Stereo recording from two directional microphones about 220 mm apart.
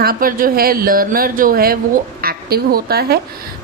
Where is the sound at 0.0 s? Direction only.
40° right (ahead or behind).